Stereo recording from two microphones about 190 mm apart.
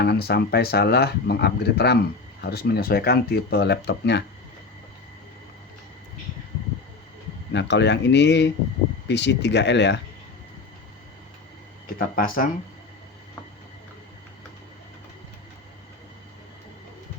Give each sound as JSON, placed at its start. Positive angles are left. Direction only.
{"t": 0.0, "sound": "speech", "side_deg": 55}
{"t": 7.5, "sound": "speech", "side_deg": 65}
{"t": 11.9, "sound": "speech", "side_deg": 50}